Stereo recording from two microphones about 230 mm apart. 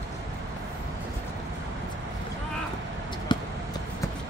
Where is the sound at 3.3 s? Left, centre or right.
Centre.